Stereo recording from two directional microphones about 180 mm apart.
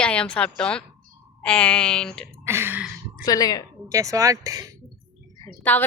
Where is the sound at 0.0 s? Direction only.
5° left (ahead or behind).